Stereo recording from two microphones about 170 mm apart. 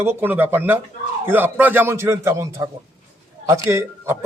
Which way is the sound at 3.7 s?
15° right (ahead or behind).